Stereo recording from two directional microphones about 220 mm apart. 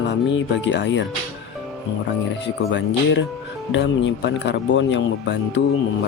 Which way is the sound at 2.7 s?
55° left (ahead or behind).